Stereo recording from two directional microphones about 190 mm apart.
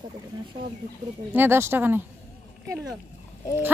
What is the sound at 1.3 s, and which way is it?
A woman's voice, 10° right (ahead or behind).